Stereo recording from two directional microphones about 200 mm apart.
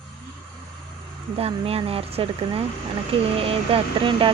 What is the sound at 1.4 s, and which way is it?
Speech, 30° right (ahead or behind).